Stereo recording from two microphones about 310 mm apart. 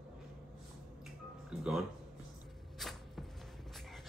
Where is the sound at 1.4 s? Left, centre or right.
Centre.